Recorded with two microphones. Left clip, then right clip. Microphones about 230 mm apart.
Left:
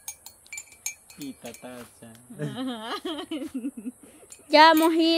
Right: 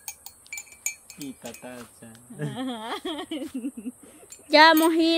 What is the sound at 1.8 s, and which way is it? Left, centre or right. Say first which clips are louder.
Speech: even; centre.